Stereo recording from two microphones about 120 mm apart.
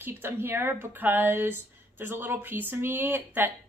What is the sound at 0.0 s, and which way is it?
Speech, 20° right (ahead or behind).